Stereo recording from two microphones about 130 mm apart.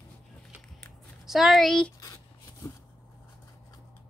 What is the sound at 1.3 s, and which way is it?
Speech, centre (ahead or behind).